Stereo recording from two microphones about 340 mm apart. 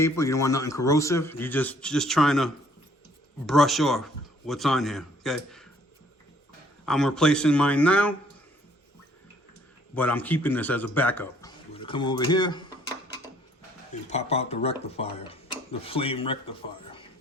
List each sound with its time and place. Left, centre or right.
0.0 s speech: centre
6.8 s speech: centre
9.9 s speech: centre
14.1 s speech: centre